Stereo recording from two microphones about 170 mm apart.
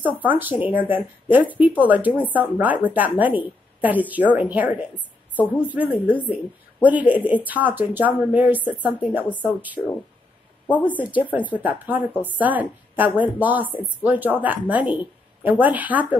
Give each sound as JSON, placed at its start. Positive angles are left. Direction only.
{"t": 0.0, "sound": "speech", "side_deg": -10}
{"t": 4.9, "sound": "a sound", "side_deg": 10}
{"t": 5.7, "sound": "speech", "side_deg": -10}
{"t": 11.0, "sound": "speech", "side_deg": -10}